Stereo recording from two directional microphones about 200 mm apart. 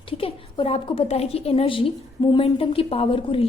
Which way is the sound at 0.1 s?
25° left (ahead or behind).